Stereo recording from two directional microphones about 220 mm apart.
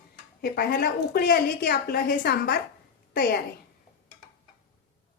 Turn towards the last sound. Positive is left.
turn(degrees=45)  # may be behind; listen again after turning